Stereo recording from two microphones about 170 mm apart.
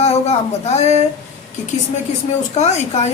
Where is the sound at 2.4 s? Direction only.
40° left (ahead or behind).